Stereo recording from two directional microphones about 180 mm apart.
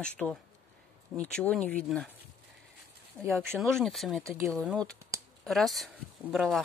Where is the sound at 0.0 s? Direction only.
5° left (ahead or behind).